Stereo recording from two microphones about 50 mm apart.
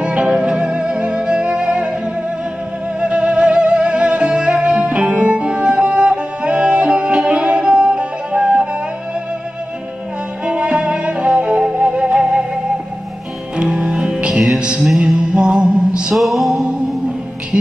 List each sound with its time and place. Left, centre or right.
0.0 s music: right
3.0 s music: right
10.4 s music: right
13.6 s music: right
16.2 s music: centre